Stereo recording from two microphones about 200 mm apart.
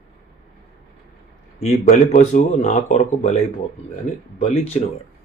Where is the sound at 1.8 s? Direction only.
35° left (ahead or behind).